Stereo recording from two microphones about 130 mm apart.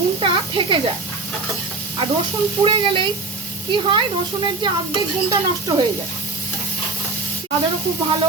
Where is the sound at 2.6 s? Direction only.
40° right (ahead or behind).